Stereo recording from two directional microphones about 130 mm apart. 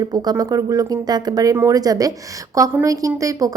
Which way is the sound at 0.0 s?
30° right (ahead or behind).